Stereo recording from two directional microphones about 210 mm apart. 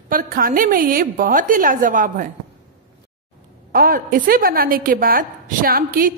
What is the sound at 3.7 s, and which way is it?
A woman's voice, 40° right (ahead or behind).